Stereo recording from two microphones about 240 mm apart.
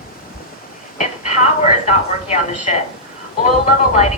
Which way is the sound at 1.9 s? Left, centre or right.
Left.